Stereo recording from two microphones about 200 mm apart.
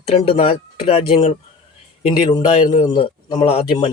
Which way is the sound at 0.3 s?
30° left (ahead or behind).